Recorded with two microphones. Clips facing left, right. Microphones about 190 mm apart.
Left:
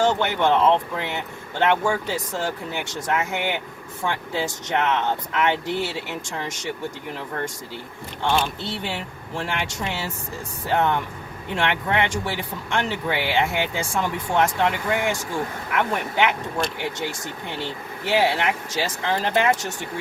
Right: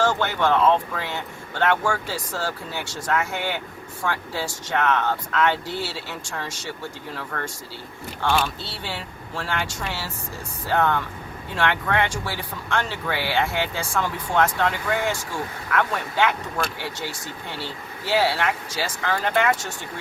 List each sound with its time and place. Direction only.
0.0 s speech: 20° left (ahead or behind)
8.6 s speech: 20° left (ahead or behind)